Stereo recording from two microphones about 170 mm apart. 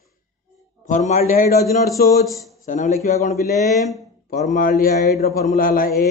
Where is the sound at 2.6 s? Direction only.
50° left (ahead or behind).